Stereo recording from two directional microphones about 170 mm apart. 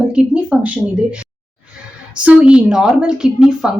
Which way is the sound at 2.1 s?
5° right (ahead or behind).